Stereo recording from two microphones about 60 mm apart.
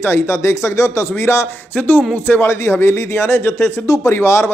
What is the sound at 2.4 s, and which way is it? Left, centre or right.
A man's voice, left.